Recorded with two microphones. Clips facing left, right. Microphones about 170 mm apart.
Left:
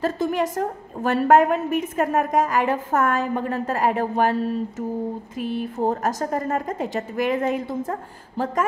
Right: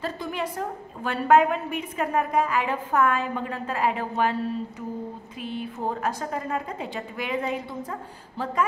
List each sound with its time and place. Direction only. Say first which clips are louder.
0.0 s a woman's voice: left 8 dB; 45° left (ahead or behind)